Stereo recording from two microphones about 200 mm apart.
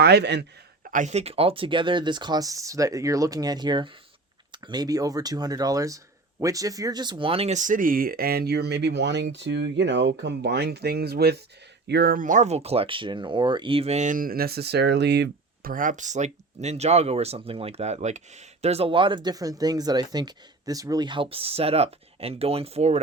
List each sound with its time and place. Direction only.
0.0 s speech: 55° right (ahead or behind)
0.9 s speech: 40° right (ahead or behind)